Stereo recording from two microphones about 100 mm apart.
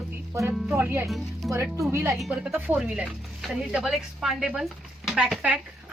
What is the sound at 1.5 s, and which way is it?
Speech, 30° right (ahead or behind).